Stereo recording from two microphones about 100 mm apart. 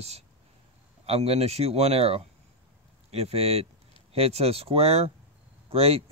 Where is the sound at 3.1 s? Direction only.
90° right.